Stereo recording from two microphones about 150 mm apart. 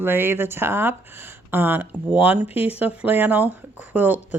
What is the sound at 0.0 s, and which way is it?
Speech, 15° right (ahead or behind).